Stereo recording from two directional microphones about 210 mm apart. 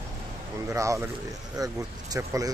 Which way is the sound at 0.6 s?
15° right (ahead or behind).